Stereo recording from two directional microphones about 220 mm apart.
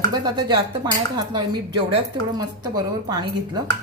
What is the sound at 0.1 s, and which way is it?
A woman's voice, 20° right (ahead or behind).